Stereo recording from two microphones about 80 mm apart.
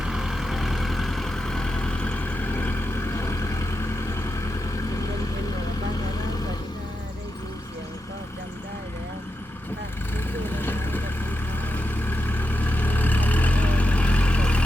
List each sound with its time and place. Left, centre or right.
0.0 s vehicle: centre; by 4.3 s left
10.5 s vehicle: left